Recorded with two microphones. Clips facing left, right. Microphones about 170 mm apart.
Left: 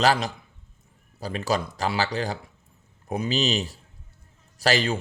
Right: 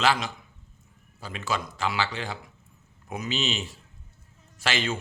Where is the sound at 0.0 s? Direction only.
40° left (ahead or behind).